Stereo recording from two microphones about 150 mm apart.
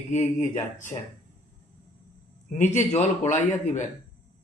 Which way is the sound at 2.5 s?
50° left (ahead or behind).